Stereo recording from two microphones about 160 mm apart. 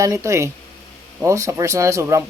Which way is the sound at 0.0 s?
20° right (ahead or behind).